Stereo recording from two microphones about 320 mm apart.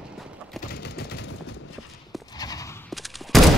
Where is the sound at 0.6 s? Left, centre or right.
Left.